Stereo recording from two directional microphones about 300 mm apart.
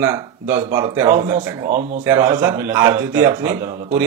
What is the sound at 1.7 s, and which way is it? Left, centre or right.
Speech, right.